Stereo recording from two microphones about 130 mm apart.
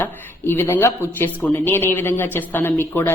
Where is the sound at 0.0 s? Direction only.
15° left (ahead or behind).